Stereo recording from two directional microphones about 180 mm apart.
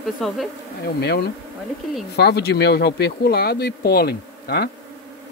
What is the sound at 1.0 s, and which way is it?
Speech, 65° left (ahead or behind).